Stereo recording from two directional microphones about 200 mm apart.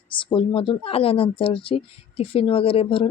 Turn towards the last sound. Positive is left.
turn(degrees=25)  # may be behind; listen again after turning